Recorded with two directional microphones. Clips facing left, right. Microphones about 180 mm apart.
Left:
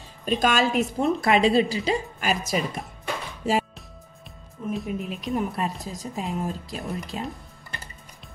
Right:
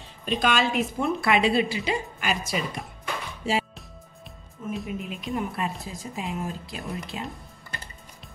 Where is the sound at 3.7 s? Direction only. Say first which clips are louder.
Even; centre (ahead or behind).